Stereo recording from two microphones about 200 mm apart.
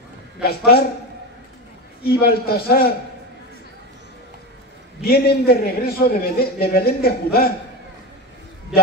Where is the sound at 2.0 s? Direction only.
50° left (ahead or behind).